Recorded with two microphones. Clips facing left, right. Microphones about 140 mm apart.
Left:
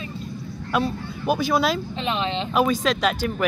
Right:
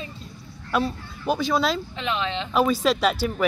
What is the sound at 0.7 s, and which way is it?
Speech, 5° left (ahead or behind).